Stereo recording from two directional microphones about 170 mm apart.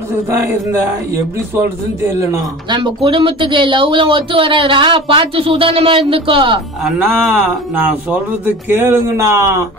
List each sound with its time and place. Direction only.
2.7 s speech: 30° right (ahead or behind)
6.8 s speech: 5° right (ahead or behind)